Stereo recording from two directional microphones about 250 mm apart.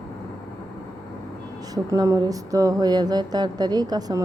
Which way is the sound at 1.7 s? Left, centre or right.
Centre.